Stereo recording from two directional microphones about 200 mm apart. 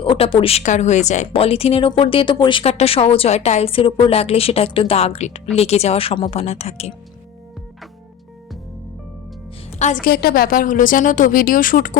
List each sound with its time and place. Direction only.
0.0 s a woman's voice: 25° left (ahead or behind)
9.7 s a woman's voice: 40° left (ahead or behind)